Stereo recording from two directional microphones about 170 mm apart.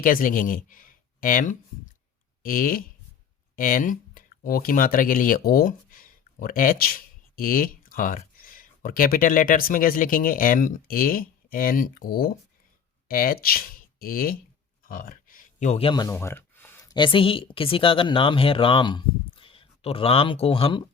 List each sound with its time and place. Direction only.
0.0 s speech: 55° left (ahead or behind); by 16.1 s 25° left (ahead or behind)
16.1 s a sound: 10° left (ahead or behind)
16.9 s a woman's voice: 30° left (ahead or behind)